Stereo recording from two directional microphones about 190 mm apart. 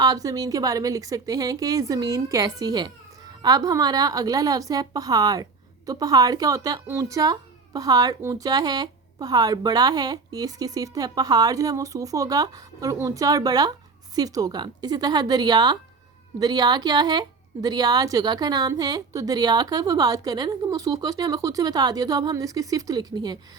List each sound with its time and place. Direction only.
0.0 s a woman's voice: 20° right (ahead or behind)